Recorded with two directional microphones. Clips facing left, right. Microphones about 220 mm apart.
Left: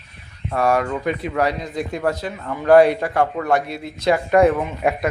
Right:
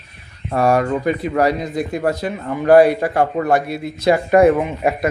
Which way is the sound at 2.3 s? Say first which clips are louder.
Right 5 dB; 25° right (ahead or behind).